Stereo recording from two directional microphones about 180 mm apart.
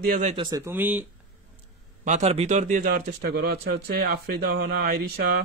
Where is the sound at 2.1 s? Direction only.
35° right (ahead or behind); by 5.4 s 55° right (ahead or behind).